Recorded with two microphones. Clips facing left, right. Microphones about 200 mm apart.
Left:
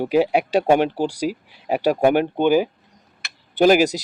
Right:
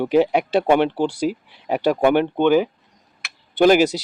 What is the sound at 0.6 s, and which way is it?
Speech, 40° left (ahead or behind).